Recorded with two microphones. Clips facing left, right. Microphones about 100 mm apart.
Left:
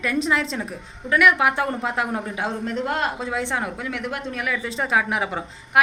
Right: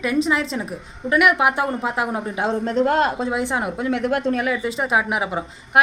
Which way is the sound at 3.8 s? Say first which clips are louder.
Right 8 dB; 35° right (ahead or behind).